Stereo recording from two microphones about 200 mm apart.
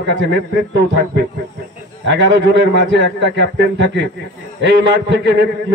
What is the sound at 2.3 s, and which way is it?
A man's voice, 65° right (ahead or behind).